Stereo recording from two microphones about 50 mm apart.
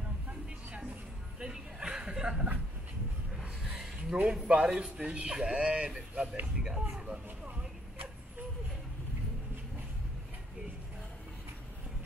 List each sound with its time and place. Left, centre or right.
1.4 s chuckle: centre
4.2 s speech: right